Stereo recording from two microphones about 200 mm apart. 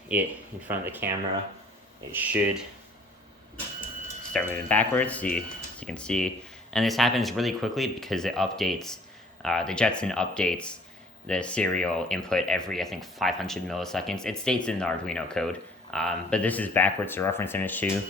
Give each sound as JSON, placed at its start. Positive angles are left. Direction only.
{"t": 0.1, "sound": "speech", "side_deg": -10}
{"t": 2.1, "sound": "speech", "side_deg": -5}
{"t": 4.3, "sound": "speech", "side_deg": 5}